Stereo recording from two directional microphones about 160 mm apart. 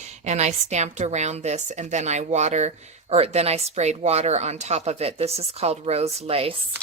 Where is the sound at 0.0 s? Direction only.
45° right (ahead or behind).